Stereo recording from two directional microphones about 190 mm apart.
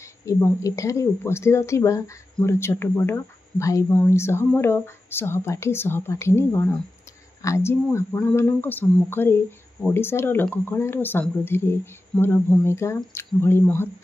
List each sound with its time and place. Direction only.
0.2 s speech: 15° left (ahead or behind)